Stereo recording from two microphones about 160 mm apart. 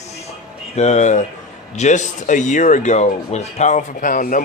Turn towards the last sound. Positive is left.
turn(degrees=55)  # may be behind; listen again after turning